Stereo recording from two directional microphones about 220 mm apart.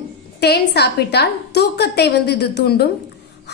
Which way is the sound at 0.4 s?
50° left (ahead or behind).